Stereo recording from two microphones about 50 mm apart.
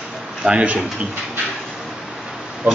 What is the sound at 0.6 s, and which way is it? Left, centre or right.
Speech, right.